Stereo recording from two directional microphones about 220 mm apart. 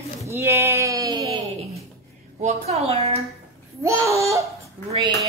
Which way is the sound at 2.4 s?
30° right (ahead or behind).